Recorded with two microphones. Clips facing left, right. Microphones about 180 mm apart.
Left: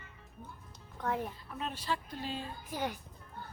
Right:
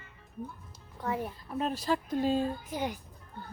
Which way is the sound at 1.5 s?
40° right (ahead or behind).